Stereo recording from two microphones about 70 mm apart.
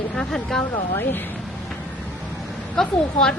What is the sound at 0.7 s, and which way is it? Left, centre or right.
Speech, left.